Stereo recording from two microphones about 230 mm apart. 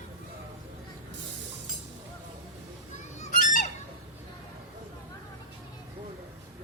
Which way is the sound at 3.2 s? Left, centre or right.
Left.